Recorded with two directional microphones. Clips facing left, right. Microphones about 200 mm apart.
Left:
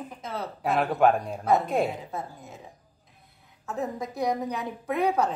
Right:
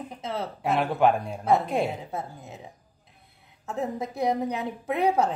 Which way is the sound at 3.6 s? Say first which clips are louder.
Right 1 dB; 25° right (ahead or behind).